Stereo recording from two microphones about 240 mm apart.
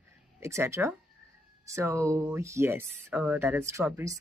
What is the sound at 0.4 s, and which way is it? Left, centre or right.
Speech, centre.